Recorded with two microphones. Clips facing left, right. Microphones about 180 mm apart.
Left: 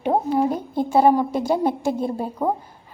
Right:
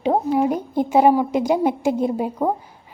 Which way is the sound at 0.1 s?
10° right (ahead or behind).